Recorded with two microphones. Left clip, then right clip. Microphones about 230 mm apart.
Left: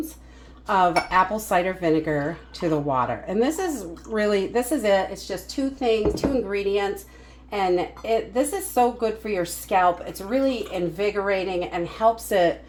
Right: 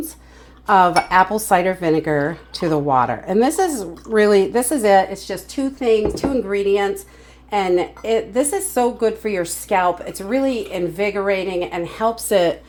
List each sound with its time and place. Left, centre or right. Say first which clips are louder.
0.7 s speech: right 6 dB; right
6.5 s speech: right 6 dB; right